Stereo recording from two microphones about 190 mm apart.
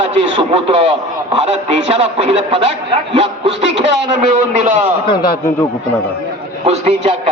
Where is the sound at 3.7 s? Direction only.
70° right (ahead or behind).